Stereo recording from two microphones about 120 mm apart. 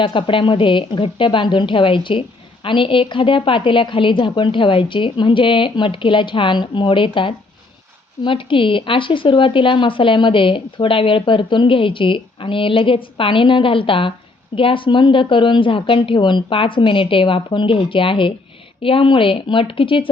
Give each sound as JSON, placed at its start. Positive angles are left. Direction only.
{"t": 0.0, "sound": "speech", "side_deg": 45}